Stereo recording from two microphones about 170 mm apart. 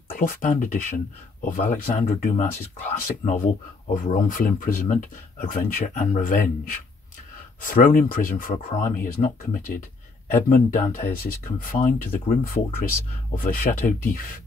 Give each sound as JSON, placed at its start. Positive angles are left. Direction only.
{"t": 0.1, "sound": "speech", "side_deg": 55}